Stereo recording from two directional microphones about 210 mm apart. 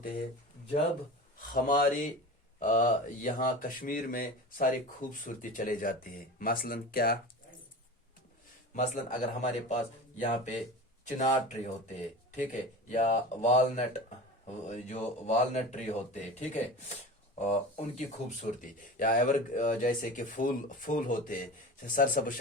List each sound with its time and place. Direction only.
1.4 s speech: 40° left (ahead or behind)
8.7 s speech: 35° left (ahead or behind)
17.3 s speech: 35° left (ahead or behind)